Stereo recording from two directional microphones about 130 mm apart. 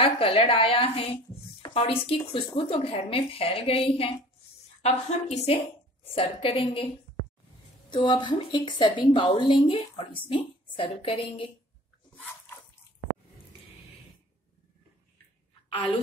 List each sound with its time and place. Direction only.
0.0 s a woman's voice: 45° left (ahead or behind)
7.9 s a woman's voice: 35° left (ahead or behind)